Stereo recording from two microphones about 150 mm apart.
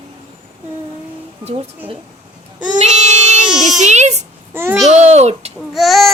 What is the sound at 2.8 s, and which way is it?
Child singing, 50° right (ahead or behind).